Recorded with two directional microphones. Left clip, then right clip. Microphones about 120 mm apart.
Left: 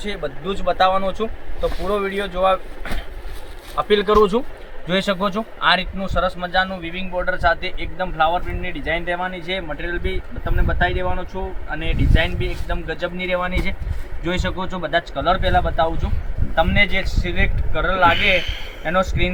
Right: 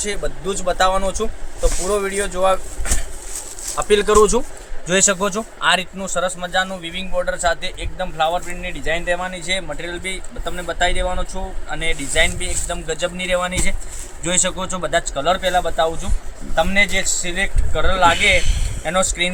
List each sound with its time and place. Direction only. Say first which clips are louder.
0.0 s speech: right 2 dB; 30° right (ahead or behind)
4.9 s a man's voice: right 3 dB; 35° right (ahead or behind)